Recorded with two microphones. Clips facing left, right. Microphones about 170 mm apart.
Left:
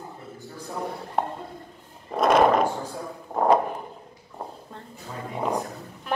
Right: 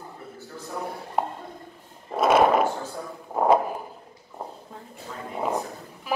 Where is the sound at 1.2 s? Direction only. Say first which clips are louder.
Even; 5° right (ahead or behind).